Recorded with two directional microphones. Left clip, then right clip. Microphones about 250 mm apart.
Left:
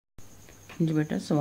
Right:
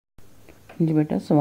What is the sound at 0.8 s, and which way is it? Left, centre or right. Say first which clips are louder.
Speech: right 6 dB; centre.